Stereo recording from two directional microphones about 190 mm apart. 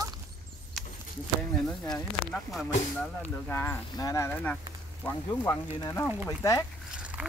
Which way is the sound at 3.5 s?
10° left (ahead or behind).